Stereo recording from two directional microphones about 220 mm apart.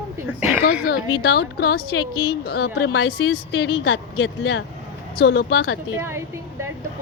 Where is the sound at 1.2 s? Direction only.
45° left (ahead or behind).